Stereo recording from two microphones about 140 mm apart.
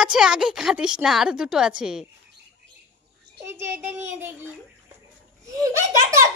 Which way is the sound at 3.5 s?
15° right (ahead or behind).